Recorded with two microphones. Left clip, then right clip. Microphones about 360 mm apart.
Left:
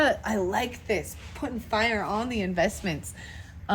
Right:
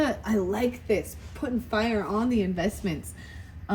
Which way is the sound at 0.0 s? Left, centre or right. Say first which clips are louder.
Left 3 dB; centre.